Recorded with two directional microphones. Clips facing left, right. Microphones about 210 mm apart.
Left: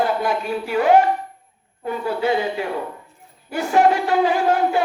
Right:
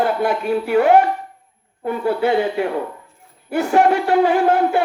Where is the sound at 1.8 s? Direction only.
55° right (ahead or behind).